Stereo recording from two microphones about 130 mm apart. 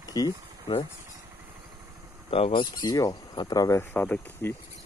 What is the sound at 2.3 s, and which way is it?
Speech, 45° left (ahead or behind).